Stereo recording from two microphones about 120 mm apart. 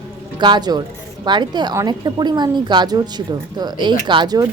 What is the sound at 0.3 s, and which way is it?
A woman's voice, 40° right (ahead or behind).